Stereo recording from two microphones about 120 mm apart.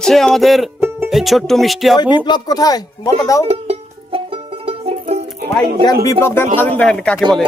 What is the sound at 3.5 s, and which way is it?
Music, 55° right (ahead or behind).